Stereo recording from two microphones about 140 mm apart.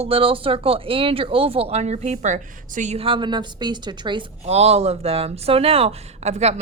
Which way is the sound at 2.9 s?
40° right (ahead or behind).